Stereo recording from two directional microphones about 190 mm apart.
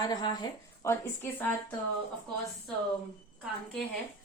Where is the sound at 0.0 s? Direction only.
20° left (ahead or behind).